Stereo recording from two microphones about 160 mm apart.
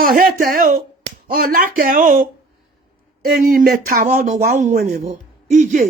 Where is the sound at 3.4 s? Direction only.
60° right (ahead or behind).